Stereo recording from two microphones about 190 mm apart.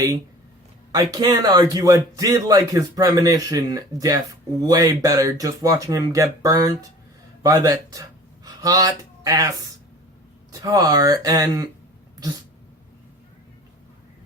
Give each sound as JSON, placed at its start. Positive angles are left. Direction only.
{"t": 0.9, "sound": "a man's voice", "side_deg": -20}
{"t": 10.6, "sound": "a man's voice", "side_deg": -20}